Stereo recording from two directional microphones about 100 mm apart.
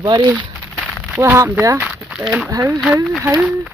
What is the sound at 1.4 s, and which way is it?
Speech, 30° right (ahead or behind).